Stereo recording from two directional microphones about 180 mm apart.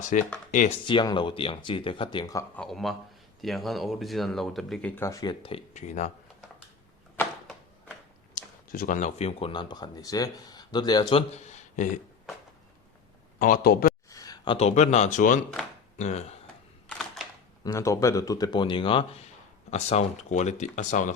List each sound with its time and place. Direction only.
0.0 s speech: 45° left (ahead or behind)
0.9 s speech: 25° left (ahead or behind)
2.6 s speech: centre (ahead or behind); by 5.5 s 25° left (ahead or behind)
5.7 s speech: 40° left (ahead or behind)
7.2 s a sound: 10° left (ahead or behind)
8.4 s speech: 50° left (ahead or behind); by 11.2 s 25° left (ahead or behind)
11.3 s speech: 40° left (ahead or behind)
13.4 s speech: 55° left (ahead or behind)
14.1 s speech: 20° left (ahead or behind); by 16.4 s 40° left (ahead or behind)
17.6 s speech: 15° left (ahead or behind); by 21.2 s 45° left (ahead or behind)